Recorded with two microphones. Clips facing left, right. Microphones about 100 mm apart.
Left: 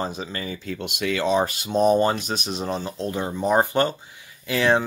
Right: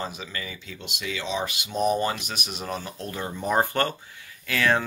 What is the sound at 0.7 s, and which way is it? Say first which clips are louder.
Speech: left 8 dB; 55° left (ahead or behind).